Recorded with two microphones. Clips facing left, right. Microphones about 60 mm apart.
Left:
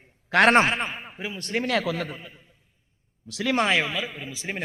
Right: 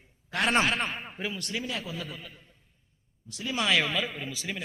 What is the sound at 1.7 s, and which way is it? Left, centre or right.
Speech, left.